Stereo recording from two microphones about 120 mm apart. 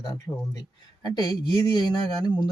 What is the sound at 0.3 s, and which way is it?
Speech, 30° left (ahead or behind).